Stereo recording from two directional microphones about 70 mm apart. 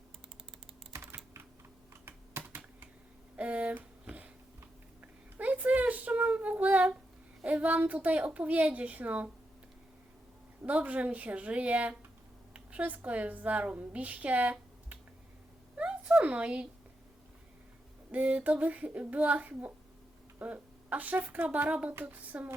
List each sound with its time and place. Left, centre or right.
0.9 s computer keyboard: right
2.0 s computer keyboard: right
3.3 s a sound: centre
5.4 s child singing: right
7.4 s a woman's voice: right
10.6 s a woman's voice: right
15.8 s a sound: centre
18.1 s a woman's voice: right